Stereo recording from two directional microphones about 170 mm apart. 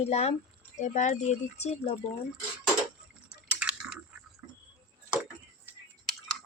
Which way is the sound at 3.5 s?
5° right (ahead or behind).